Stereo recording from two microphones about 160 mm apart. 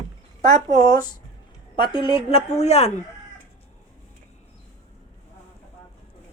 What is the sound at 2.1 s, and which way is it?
Speech, 40° left (ahead or behind).